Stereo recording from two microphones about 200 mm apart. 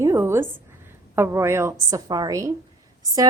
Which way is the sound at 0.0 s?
15° right (ahead or behind).